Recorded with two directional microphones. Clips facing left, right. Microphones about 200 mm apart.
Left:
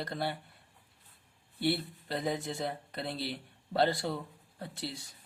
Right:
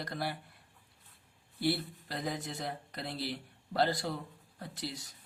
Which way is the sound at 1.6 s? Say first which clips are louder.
Left 1 dB; 25° left (ahead or behind).